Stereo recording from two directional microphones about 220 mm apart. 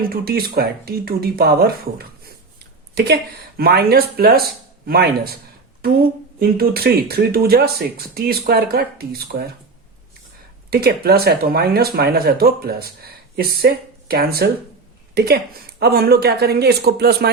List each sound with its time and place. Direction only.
0.1 s speech: 45° right (ahead or behind)
10.7 s speech: 45° right (ahead or behind)